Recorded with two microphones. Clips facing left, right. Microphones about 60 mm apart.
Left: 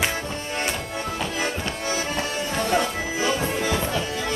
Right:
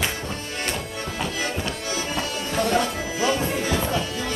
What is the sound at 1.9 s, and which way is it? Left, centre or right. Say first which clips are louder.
Music: left 3 dB; left.